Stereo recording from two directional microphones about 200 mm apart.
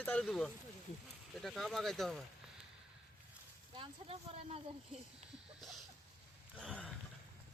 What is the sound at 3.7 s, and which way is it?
Speech, 25° right (ahead or behind).